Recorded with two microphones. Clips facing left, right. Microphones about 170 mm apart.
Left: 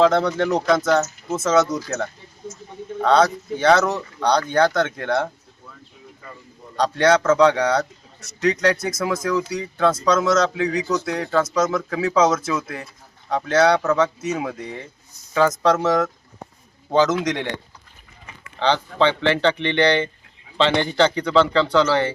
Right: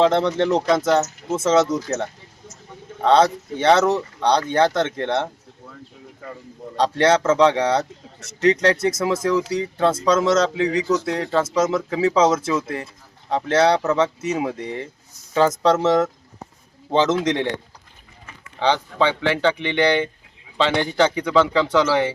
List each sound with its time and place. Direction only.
0.0 s a man's voice: 25° right (ahead or behind)
6.7 s a man's voice: 25° right (ahead or behind)
18.6 s speech: 10° right (ahead or behind)